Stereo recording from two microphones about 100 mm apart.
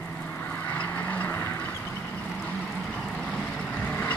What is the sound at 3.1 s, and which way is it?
Vehicle, 5° left (ahead or behind).